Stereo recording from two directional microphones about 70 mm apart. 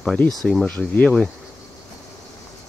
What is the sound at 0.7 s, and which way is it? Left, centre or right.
Speech, left.